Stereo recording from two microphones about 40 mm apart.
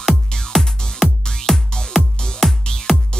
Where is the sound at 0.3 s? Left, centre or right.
Centre.